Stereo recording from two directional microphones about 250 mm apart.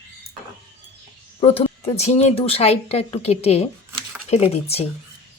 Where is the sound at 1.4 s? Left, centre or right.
Left.